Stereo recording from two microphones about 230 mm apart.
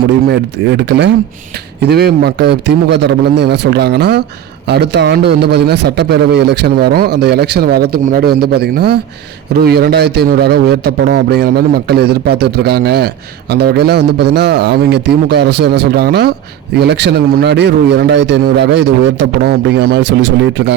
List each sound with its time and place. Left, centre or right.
0.3 s a man's voice: right